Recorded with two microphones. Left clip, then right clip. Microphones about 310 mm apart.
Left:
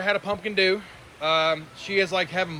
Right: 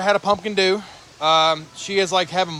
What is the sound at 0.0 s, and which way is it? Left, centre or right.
Speech, centre.